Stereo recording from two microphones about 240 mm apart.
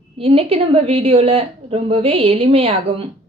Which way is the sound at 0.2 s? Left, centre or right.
Right.